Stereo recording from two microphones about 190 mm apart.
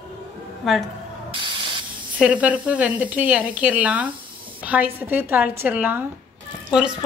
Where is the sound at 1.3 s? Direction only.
25° right (ahead or behind).